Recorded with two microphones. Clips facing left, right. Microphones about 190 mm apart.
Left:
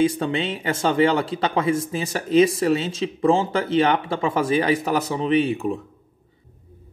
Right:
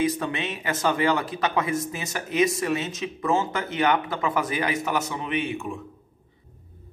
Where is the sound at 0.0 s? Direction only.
30° left (ahead or behind).